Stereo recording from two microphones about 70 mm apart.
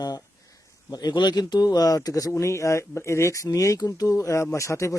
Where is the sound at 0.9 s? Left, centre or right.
Left.